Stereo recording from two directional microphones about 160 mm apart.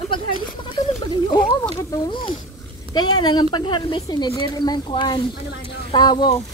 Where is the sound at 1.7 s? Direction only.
30° left (ahead or behind).